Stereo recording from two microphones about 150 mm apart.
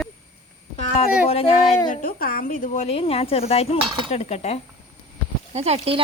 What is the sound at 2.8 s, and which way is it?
Speech, 40° left (ahead or behind).